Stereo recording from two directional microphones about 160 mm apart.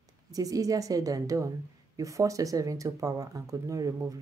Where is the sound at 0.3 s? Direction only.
20° right (ahead or behind).